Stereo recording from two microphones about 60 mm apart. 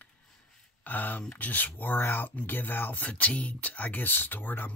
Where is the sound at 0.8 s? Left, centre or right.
Left.